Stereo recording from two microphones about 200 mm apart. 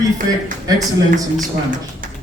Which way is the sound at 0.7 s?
20° right (ahead or behind).